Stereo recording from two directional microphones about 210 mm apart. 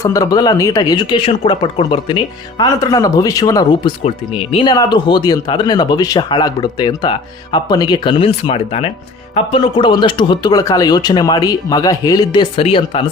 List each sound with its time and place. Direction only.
0.0 s speech: 15° left (ahead or behind)